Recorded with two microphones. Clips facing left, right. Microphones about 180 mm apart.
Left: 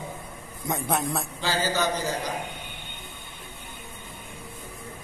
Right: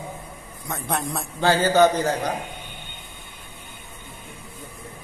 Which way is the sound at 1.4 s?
55° right (ahead or behind).